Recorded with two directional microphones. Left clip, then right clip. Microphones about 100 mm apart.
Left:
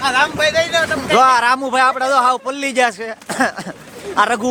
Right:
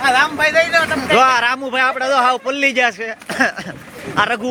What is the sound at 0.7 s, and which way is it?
Speech, 10° left (ahead or behind).